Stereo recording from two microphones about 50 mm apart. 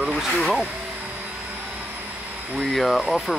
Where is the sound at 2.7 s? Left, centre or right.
Centre.